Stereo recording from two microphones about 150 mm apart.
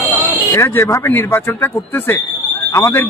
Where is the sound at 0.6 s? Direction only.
20° left (ahead or behind).